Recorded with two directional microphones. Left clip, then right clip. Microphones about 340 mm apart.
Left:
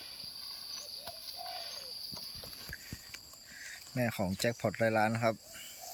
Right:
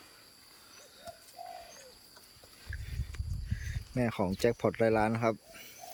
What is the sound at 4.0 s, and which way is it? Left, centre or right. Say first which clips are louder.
Speech: right 3 dB; centre.